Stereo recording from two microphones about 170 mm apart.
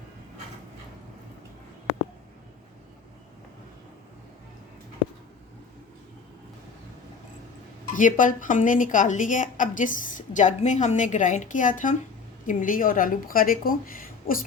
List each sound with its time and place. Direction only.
7.9 s a woman's voice: 50° left (ahead or behind)